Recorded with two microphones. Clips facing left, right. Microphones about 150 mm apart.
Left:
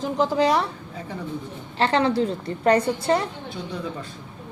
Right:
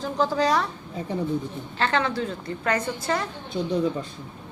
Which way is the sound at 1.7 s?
30° left (ahead or behind).